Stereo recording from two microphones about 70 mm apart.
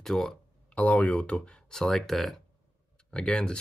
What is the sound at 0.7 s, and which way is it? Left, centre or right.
Speech, centre.